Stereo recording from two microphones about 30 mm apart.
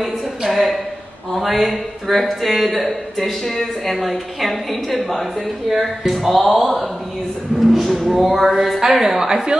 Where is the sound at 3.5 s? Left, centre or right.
Centre.